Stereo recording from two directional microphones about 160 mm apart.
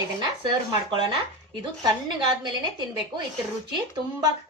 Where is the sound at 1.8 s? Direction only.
30° right (ahead or behind).